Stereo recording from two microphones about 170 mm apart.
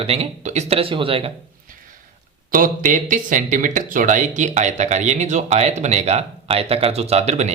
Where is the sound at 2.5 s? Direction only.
50° right (ahead or behind).